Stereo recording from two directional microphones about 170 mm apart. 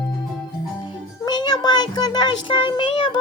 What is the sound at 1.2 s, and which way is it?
Speech, 25° left (ahead or behind).